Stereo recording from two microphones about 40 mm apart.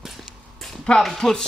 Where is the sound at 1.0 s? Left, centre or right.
Centre.